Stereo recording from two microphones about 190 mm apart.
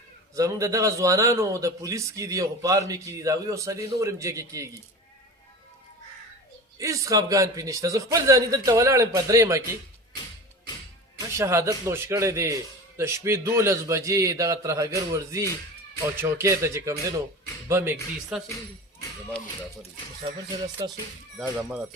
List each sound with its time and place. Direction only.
0.3 s a man's voice: 15° right (ahead or behind)
6.7 s a man's voice: 15° right (ahead or behind)
11.3 s a man's voice: 15° right (ahead or behind)
20.8 s speech: 20° right (ahead or behind)
21.5 s speech: 5° right (ahead or behind)